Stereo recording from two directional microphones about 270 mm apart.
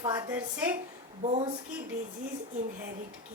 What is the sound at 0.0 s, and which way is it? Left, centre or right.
Speech, centre.